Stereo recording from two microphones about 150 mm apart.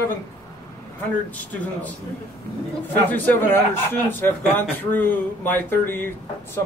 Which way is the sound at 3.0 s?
10° left (ahead or behind).